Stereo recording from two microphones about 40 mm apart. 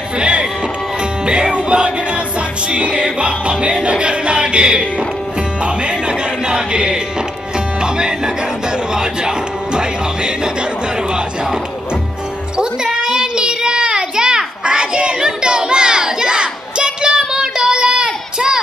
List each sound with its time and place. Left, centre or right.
1.2 s music: right
12.5 s child singing: centre
15.1 s a sound: centre